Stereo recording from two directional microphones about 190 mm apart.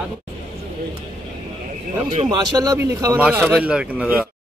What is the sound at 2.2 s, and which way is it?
Speech, 20° right (ahead or behind).